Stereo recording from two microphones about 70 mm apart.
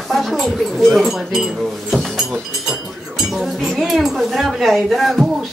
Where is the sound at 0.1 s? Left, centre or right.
Centre.